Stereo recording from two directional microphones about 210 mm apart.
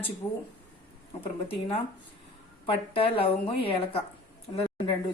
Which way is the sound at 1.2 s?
25° left (ahead or behind).